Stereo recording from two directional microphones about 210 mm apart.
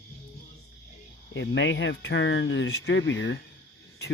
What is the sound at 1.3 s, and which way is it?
Speech, 60° left (ahead or behind).